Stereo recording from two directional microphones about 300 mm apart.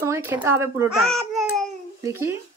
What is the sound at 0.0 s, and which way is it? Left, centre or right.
Speech, centre.